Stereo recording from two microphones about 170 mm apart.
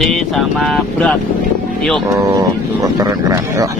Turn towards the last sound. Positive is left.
turn(degrees=-20)  # may be behind; listen again after turning